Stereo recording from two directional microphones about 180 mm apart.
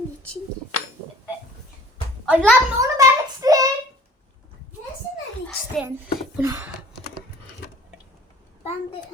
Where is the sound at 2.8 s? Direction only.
20° right (ahead or behind).